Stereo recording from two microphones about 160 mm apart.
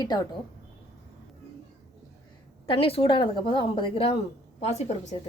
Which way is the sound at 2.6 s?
35° left (ahead or behind).